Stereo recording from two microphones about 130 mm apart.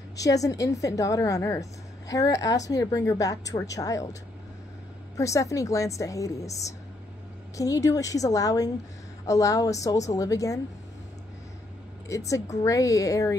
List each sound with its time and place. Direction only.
0.1 s a woman's voice: 25° left (ahead or behind)
7.5 s a woman's voice: 25° left (ahead or behind)
12.1 s a woman's voice: 25° left (ahead or behind)